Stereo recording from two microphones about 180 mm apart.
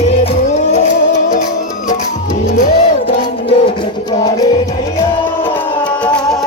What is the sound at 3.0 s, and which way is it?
Music, 30° left (ahead or behind).